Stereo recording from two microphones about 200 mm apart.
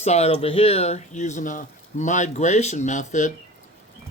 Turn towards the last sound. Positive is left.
turn(degrees=35)  # may be behind; listen again after turning